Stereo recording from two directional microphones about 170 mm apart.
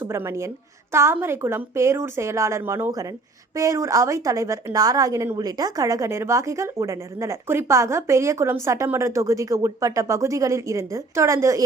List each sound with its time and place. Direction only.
0.0 s a woman's voice: 15° right (ahead or behind)